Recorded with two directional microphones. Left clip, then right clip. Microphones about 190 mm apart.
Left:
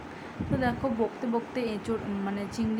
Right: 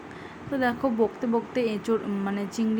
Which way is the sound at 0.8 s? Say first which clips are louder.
Right 4 dB; 20° right (ahead or behind).